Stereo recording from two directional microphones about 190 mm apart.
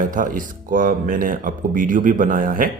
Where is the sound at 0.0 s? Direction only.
45° right (ahead or behind).